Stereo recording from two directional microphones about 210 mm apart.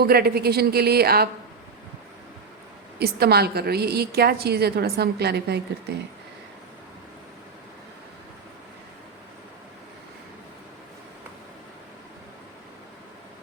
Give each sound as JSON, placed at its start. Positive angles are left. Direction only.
{"t": 0.0, "sound": "a woman's voice", "side_deg": -45}
{"t": 3.0, "sound": "a woman's voice", "side_deg": -50}